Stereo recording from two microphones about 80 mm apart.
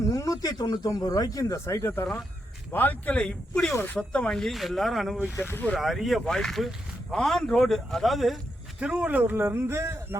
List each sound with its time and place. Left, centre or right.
0.1 s speech: left
1.5 s speech: left
2.7 s speech: left; by 5.1 s centre
5.4 s speech: left
5.7 s speech: centre
8.8 s speech: centre
9.0 s a man's voice: right